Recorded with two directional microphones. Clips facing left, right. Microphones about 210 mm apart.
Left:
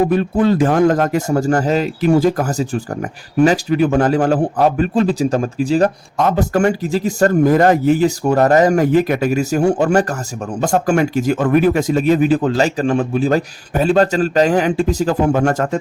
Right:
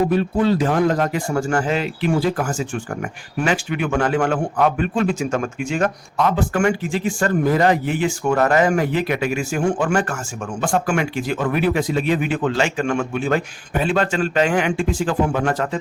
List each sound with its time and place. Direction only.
0.1 s a man's voice: 50° left (ahead or behind)